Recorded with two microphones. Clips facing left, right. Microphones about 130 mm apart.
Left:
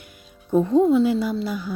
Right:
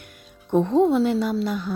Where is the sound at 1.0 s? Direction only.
55° right (ahead or behind).